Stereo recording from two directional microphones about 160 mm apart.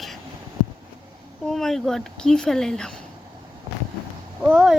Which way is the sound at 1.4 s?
Centre (ahead or behind).